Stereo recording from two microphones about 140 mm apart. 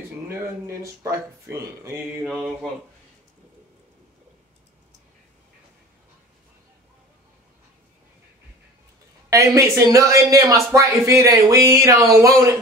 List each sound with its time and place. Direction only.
0.4 s speech: 20° right (ahead or behind)
2.2 s speech: centre (ahead or behind)
9.3 s speech: 20° right (ahead or behind)